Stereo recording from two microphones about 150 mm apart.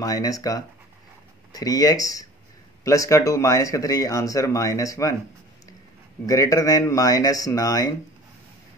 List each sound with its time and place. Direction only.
0.0 s speech: 25° left (ahead or behind)
6.2 s speech: 20° left (ahead or behind)